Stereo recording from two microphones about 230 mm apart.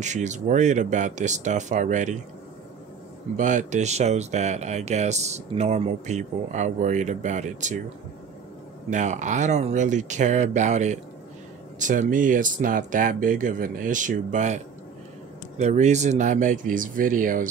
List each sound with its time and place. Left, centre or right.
0.0 s speech: right
3.3 s speech: right
8.9 s speech: right